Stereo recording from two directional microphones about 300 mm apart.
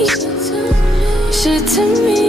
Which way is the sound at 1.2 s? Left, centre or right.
Centre.